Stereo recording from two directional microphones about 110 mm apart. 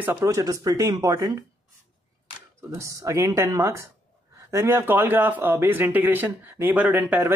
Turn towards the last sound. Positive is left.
turn(degrees=-20)  # may be behind; listen again after turning